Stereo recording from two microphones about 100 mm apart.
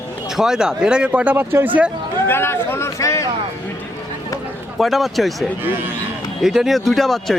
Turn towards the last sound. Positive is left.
turn(degrees=0)  # may be behind; listen again after turning